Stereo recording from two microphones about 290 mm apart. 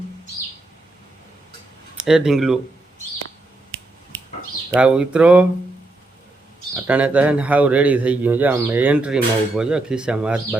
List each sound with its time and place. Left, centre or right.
2.0 s a man's voice: centre
4.7 s a man's voice: centre
6.8 s a man's voice: centre